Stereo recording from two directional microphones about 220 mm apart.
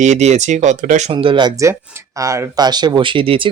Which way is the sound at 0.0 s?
30° right (ahead or behind).